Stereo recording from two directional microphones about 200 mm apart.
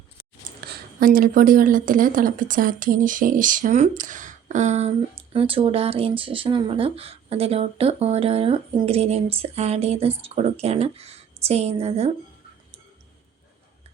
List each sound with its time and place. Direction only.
0.7 s speech: 45° right (ahead or behind)